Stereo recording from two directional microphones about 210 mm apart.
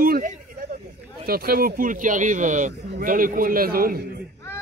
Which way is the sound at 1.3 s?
45° right (ahead or behind).